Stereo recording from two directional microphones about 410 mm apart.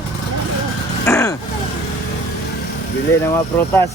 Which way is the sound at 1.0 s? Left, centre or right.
Centre.